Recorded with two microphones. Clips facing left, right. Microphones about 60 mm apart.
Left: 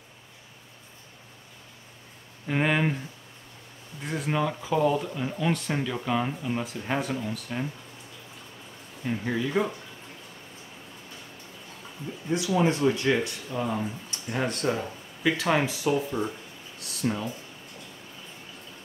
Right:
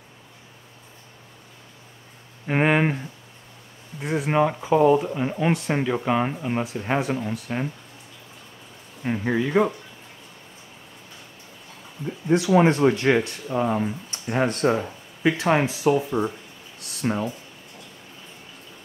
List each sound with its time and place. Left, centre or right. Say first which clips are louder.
2.4 s speech: right 5 dB; right
4.0 s speech: right 7 dB; centre
4.3 s speech: right 7 dB; right
6.6 s speech: right 5 dB; centre
9.0 s speech: right 5 dB; right
12.3 s speech: right 7 dB; right
17.0 s speech: right 3 dB; right